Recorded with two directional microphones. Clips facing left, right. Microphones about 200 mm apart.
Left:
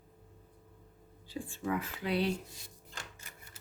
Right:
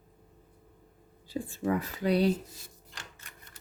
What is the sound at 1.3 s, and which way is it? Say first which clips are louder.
Speech: right 5 dB; 40° right (ahead or behind).